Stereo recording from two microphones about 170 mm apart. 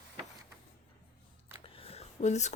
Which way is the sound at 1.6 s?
35° left (ahead or behind).